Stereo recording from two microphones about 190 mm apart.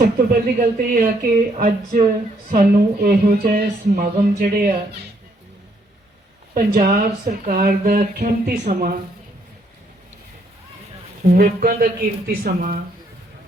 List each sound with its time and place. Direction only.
0.0 s speech: 50° right (ahead or behind)
6.5 s speech: 45° right (ahead or behind)
11.3 s speech: 50° right (ahead or behind)